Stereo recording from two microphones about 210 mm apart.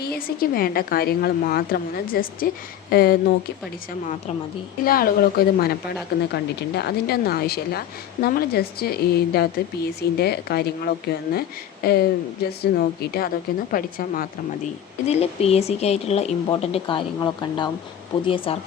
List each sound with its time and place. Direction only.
0.0 s speech: 45° left (ahead or behind)
4.9 s speech: 45° left (ahead or behind)
15.0 s speech: 30° left (ahead or behind)